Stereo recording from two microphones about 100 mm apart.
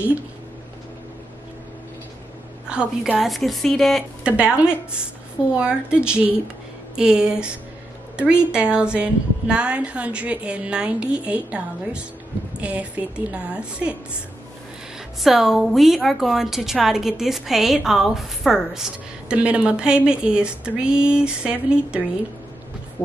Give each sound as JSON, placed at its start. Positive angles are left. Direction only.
{"t": 2.7, "sound": "a woman's voice", "side_deg": -10}
{"t": 4.2, "sound": "a woman's voice", "side_deg": -10}
{"t": 8.5, "sound": "a woman's voice", "side_deg": -10}
{"t": 15.2, "sound": "a woman's voice", "side_deg": -5}
{"t": 23.0, "sound": "speech", "side_deg": 20}